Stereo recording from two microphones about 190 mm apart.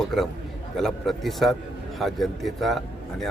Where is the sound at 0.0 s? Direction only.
Centre (ahead or behind).